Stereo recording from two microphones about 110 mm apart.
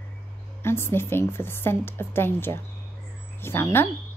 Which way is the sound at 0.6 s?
20° left (ahead or behind).